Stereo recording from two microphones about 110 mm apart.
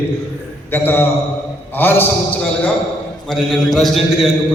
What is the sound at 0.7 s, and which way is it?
A man's voice, 15° left (ahead or behind).